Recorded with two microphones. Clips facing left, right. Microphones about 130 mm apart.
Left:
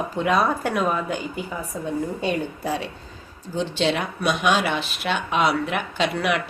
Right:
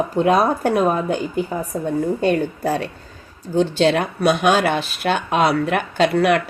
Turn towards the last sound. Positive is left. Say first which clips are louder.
# right 7 dB
turn(degrees=-45)  # may be behind; listen again after turning